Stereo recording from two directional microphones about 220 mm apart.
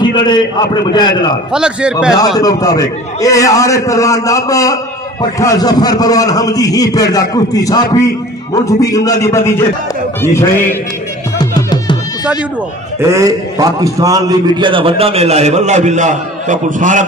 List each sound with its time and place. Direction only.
0.0 s a man's voice: 20° left (ahead or behind)
1.5 s a man's voice: 5° right (ahead or behind)
2.1 s a man's voice: 15° left (ahead or behind)
11.3 s music: 20° left (ahead or behind)
13.1 s a man's voice: 15° right (ahead or behind); by 17.0 s 35° right (ahead or behind)